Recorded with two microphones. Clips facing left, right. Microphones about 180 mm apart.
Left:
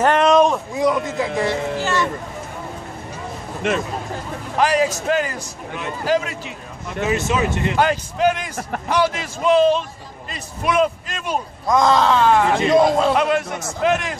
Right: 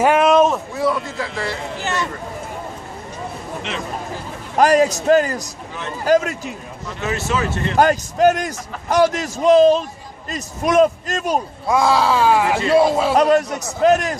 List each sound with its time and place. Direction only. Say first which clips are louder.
0.0 s a sound: right 1 dB; 5° right (ahead or behind)
0.7 s a man's voice: left 2 dB; 20° left (ahead or behind)
1.8 s a sound: even; 20° right (ahead or behind)
3.6 s speech: left 10 dB; 50° left (ahead or behind)
4.6 s a man's voice: right 4 dB; 45° right (ahead or behind)
7.0 s speech: left 2 dB; 20° left (ahead or behind)
7.7 s a man's voice: right 3 dB; 45° right (ahead or behind)
11.6 s speech: left 1 dB; 10° right (ahead or behind)
13.1 s a man's voice: right 4 dB; 40° right (ahead or behind)